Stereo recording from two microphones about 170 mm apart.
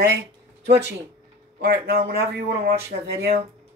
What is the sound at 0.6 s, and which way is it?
Speech, 80° right.